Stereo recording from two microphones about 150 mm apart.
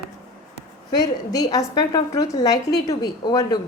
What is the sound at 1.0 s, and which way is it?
A woman's voice, 25° left (ahead or behind).